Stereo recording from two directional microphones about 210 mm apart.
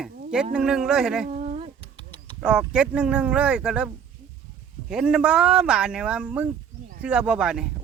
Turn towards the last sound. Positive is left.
turn(degrees=-5)  # may be behind; listen again after turning